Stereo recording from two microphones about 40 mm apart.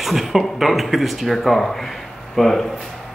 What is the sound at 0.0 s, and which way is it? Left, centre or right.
Speech, centre.